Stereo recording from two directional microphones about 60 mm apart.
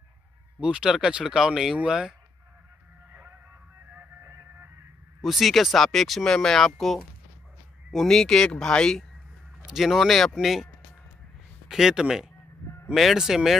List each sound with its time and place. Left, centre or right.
0.6 s speech: centre
3.1 s music: right
3.9 s music: right
5.2 s speech: centre
9.7 s speech: centre
11.7 s speech: centre